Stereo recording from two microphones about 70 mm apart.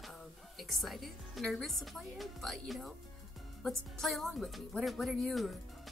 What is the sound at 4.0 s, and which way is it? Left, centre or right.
Speech, centre.